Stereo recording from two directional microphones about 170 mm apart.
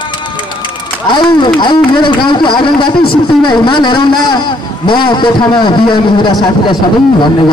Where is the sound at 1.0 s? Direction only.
25° left (ahead or behind).